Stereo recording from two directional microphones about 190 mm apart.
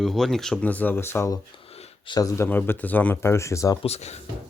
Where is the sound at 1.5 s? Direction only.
30° left (ahead or behind).